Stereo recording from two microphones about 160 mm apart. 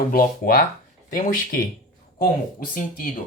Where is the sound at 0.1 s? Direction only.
65° left (ahead or behind).